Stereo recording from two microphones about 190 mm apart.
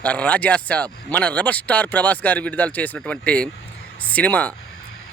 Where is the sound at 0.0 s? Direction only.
5° left (ahead or behind).